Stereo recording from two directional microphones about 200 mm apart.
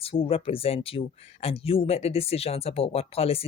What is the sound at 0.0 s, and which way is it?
Speech, 30° left (ahead or behind).